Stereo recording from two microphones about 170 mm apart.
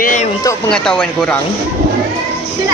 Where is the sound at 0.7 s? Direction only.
5° left (ahead or behind).